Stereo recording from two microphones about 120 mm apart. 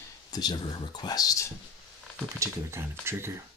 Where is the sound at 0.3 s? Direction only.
35° left (ahead or behind).